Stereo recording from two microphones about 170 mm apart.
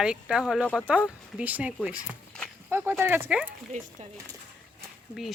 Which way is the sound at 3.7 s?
50° right (ahead or behind).